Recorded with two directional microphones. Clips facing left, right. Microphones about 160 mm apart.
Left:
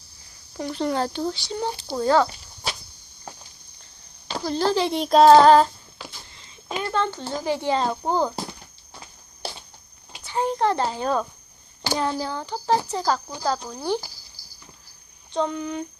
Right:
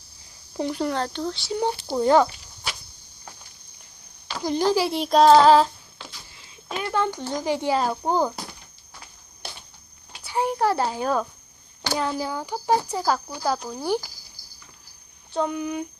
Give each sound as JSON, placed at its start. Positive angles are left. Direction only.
{"t": 0.5, "sound": "speech", "side_deg": -20}
{"t": 0.8, "sound": "speech", "side_deg": 5}
{"t": 1.5, "sound": "speech", "side_deg": -15}
{"t": 4.4, "sound": "a sound", "side_deg": -15}
{"t": 6.8, "sound": "speech", "side_deg": -10}
{"t": 9.4, "sound": "a sound", "side_deg": 35}
{"t": 10.2, "sound": "a child's voice", "side_deg": -10}
{"t": 14.4, "sound": "a sound", "side_deg": -45}
{"t": 15.3, "sound": "speech", "side_deg": -10}